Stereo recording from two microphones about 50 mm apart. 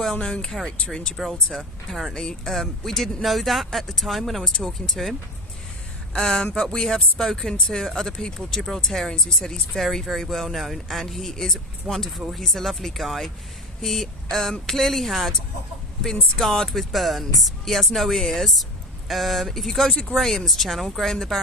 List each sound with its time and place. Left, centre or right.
0.0 s speech: centre
1.1 s speech: centre
6.1 s speech: centre
7.8 s speech: centre
11.9 s speech: centre
12.4 s speech: centre